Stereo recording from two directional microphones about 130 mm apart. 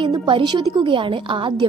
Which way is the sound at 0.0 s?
35° right (ahead or behind).